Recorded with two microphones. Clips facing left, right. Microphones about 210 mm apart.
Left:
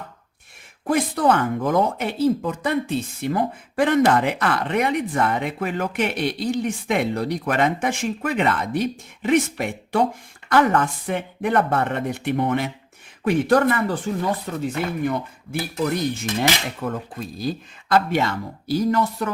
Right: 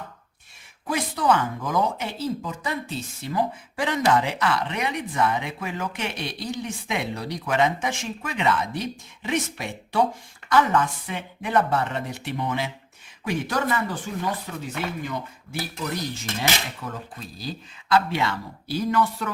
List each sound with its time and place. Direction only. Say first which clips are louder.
0.9 s speech: left 4 dB; 55° left (ahead or behind)
15.5 s speech: left 7 dB; 55° left (ahead or behind)